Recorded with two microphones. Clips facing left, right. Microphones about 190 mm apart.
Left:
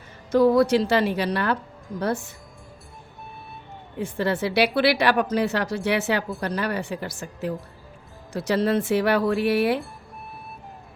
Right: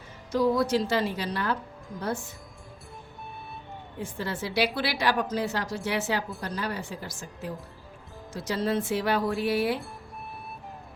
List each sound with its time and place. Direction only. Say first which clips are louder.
0.3 s a woman's voice: left 7 dB; 60° left (ahead or behind)
3.9 s a woman's voice: left 9 dB; 70° left (ahead or behind)